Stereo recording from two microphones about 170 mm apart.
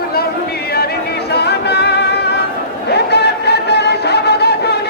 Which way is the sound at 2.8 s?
80° left.